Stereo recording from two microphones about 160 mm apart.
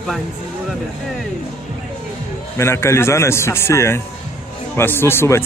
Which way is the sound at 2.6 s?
15° left (ahead or behind).